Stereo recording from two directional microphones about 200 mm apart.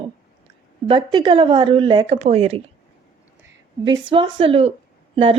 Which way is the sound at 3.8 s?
25° right (ahead or behind).